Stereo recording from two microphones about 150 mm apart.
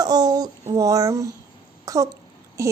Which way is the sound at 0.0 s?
25° right (ahead or behind).